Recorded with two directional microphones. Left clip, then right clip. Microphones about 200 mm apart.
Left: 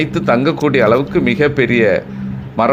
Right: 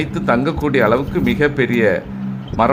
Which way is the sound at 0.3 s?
10° left (ahead or behind).